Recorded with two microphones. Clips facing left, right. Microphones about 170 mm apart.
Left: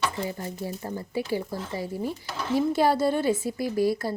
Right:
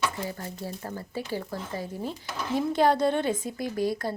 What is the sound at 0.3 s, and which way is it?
Speech, 15° left (ahead or behind).